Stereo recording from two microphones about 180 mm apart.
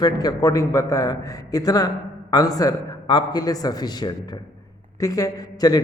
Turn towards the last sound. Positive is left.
turn(degrees=20)  # may be behind; listen again after turning